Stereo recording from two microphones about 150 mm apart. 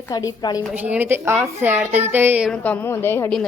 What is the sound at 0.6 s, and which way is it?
A woman's voice, 10° right (ahead or behind).